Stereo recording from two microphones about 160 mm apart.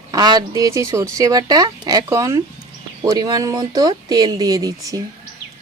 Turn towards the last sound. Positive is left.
turn(degrees=-20)  # may be behind; listen again after turning